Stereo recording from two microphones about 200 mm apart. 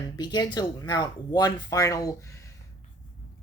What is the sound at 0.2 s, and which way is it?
Speech, 20° left (ahead or behind).